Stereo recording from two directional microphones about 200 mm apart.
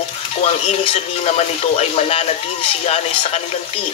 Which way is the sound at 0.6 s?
35° left (ahead or behind).